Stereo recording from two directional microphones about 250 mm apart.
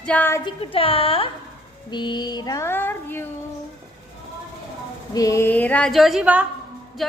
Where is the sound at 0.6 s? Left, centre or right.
Left.